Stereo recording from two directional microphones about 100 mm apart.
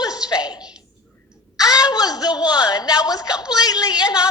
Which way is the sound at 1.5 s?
40° left (ahead or behind).